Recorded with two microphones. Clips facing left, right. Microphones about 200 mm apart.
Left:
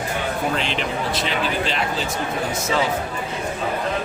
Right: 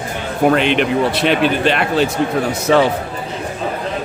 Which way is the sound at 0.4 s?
65° right (ahead or behind).